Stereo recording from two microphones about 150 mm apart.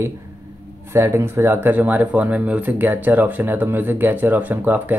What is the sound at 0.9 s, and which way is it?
Speech, 15° right (ahead or behind).